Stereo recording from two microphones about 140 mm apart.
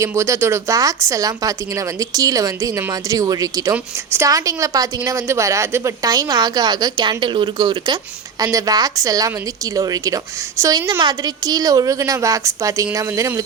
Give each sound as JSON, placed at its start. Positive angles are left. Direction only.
{"t": 0.0, "sound": "a woman's voice", "side_deg": -20}